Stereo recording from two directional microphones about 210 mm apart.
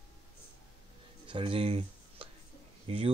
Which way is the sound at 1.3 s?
25° right (ahead or behind).